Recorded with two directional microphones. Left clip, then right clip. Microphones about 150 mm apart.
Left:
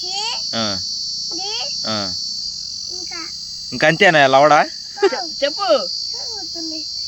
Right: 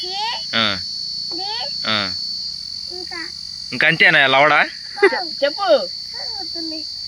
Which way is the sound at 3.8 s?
25° left (ahead or behind).